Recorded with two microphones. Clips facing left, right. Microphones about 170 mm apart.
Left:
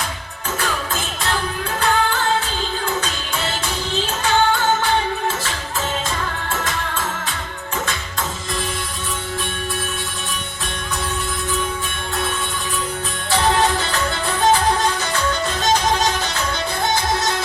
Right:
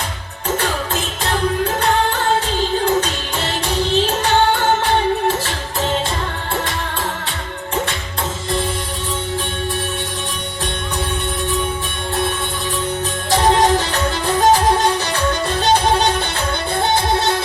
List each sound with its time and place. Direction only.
2.8 s music: 35° right (ahead or behind)
13.3 s music: 35° right (ahead or behind)